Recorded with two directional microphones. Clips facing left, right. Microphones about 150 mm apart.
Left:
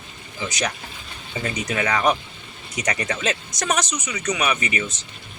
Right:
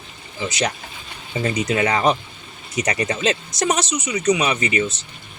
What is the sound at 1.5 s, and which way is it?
Speech, 30° right (ahead or behind).